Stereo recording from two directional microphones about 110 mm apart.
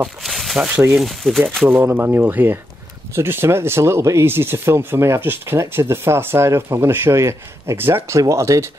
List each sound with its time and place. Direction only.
0.0 s speech: centre (ahead or behind)
1.7 s speech: 15° right (ahead or behind)